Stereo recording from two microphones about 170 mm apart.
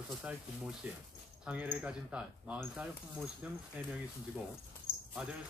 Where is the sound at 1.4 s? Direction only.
10° right (ahead or behind).